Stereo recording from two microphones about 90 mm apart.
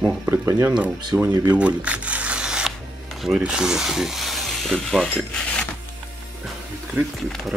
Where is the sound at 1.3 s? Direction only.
45° right (ahead or behind).